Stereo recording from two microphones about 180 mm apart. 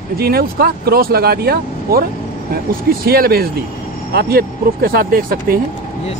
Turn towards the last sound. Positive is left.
turn(degrees=-55)  # may be behind; listen again after turning